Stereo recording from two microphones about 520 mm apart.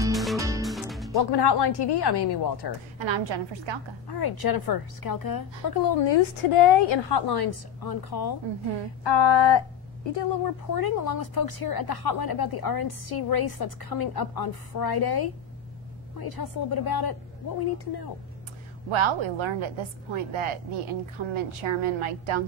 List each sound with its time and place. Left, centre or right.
0.0 s music: centre
1.1 s a woman's voice: left
3.0 s a woman's voice: right
4.1 s a woman's voice: left
9.0 s a sound: left
10.1 s a woman's voice: left
18.9 s a woman's voice: right